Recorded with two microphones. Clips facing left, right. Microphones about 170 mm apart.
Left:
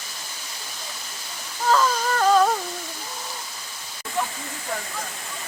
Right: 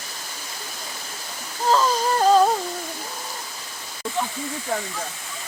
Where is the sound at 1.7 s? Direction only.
35° right (ahead or behind).